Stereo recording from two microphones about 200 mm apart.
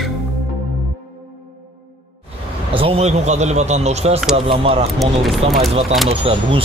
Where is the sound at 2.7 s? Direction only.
30° right (ahead or behind).